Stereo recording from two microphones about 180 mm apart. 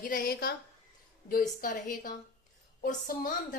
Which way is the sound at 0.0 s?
55° left (ahead or behind).